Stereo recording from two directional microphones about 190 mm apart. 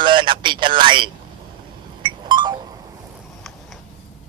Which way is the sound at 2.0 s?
25° right (ahead or behind).